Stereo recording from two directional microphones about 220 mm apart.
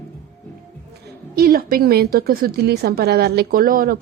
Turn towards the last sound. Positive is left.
turn(degrees=-40)  # may be behind; listen again after turning